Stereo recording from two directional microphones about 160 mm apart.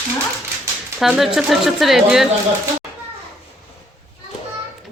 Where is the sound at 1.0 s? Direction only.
Centre (ahead or behind).